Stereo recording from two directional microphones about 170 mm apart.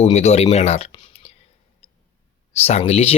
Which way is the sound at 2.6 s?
40° left (ahead or behind).